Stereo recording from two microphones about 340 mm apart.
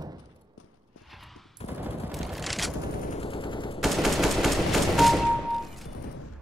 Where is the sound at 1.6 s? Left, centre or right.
Centre.